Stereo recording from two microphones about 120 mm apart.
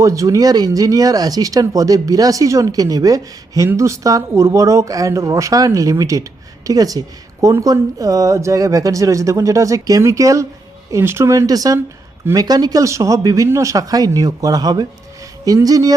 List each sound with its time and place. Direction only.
0.0 s speech: 25° right (ahead or behind)